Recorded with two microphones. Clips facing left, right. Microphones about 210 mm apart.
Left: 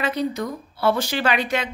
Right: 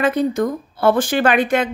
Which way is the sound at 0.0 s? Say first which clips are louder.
Right 7 dB; 50° right (ahead or behind).